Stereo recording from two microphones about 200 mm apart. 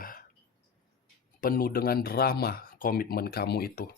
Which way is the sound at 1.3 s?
45° left (ahead or behind).